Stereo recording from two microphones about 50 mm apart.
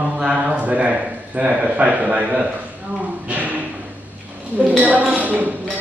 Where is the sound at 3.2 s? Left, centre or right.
Right.